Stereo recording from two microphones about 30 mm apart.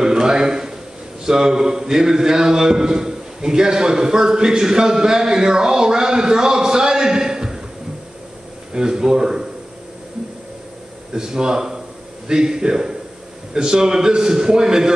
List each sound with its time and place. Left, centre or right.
0.0 s a sound: right
1.2 s a man's voice: right
8.7 s a man's voice: right
11.1 s a man's voice: right